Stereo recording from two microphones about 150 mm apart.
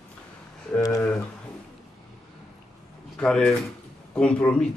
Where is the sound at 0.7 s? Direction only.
15° left (ahead or behind).